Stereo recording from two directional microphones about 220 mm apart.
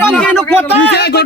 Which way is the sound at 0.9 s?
50° left (ahead or behind).